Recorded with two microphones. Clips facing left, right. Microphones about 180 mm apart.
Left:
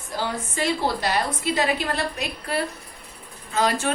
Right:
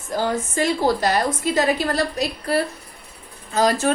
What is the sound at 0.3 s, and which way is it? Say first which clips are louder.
A woman's voice: right 3 dB; 45° right (ahead or behind).